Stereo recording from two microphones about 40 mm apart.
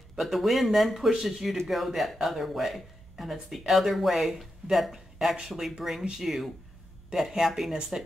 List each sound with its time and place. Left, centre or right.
0.2 s speech: centre
5.5 s speech: centre